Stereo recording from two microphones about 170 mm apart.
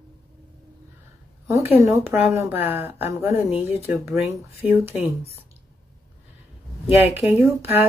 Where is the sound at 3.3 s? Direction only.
35° left (ahead or behind).